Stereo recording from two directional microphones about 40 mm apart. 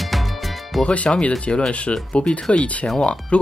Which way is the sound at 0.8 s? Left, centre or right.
Left.